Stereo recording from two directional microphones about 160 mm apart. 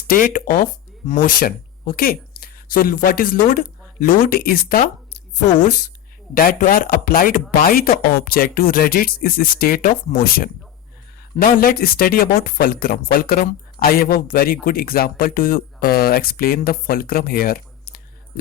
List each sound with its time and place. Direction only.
0.1 s speech: 60° left (ahead or behind)
6.3 s speech: 60° left (ahead or behind)